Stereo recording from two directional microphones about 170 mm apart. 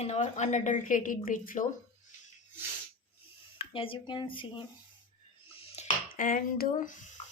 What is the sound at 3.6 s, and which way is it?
Speech, 30° left (ahead or behind).